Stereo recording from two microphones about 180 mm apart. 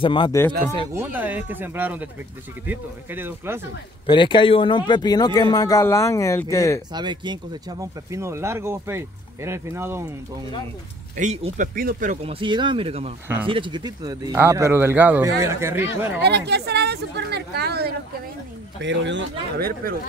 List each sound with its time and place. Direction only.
0.0 s a man's voice: 25° left (ahead or behind)
0.9 s speech: 10° right (ahead or behind)
4.0 s a man's voice: 25° left (ahead or behind)
6.9 s speech: 25° right (ahead or behind)
11.1 s speech: 40° right (ahead or behind); by 15.9 s 15° right (ahead or behind)
16.3 s a woman's voice: 70° right (ahead or behind)
18.8 s speech: 80° right